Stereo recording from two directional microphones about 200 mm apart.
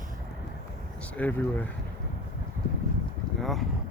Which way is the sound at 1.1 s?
10° left (ahead or behind).